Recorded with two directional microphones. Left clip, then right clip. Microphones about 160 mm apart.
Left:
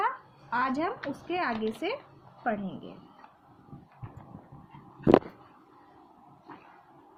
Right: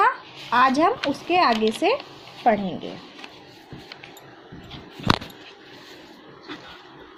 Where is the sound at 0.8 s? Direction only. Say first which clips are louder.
Right 12 dB; 25° right (ahead or behind).